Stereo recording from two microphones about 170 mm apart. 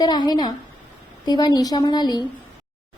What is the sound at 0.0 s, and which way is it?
A woman's voice, 25° left (ahead or behind).